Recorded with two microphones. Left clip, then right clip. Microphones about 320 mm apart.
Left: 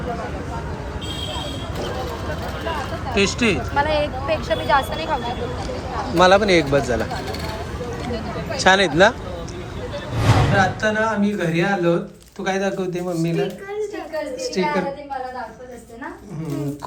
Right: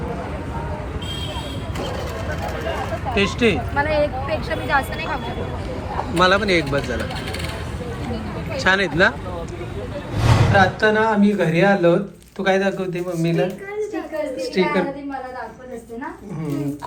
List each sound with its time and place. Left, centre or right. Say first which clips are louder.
3.2 s speech: even; centre
3.8 s speech: even; left
6.1 s speech: left 3 dB; centre
8.5 s speech: left 3 dB; centre
10.6 s speech: right 3 dB; centre
14.6 s speech: right 2 dB; centre